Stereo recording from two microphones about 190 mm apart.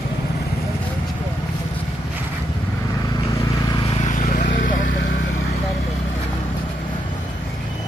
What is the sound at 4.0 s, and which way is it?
Vehicle, 45° left (ahead or behind).